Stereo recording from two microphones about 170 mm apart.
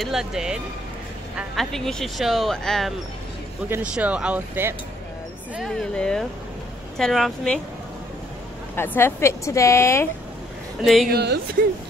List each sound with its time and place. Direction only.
0.0 s speech: 5° right (ahead or behind)
3.6 s speech: 10° right (ahead or behind)
5.6 s speech: 5° left (ahead or behind)
8.7 s speech: 15° left (ahead or behind)
10.8 s speech: centre (ahead or behind)
11.1 s speech: 70° right (ahead or behind)